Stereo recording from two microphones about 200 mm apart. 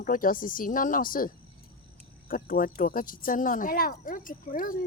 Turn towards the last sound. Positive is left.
turn(degrees=45)  # may be behind; listen again after turning